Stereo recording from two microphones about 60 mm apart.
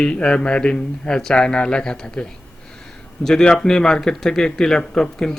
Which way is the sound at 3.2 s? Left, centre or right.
Centre.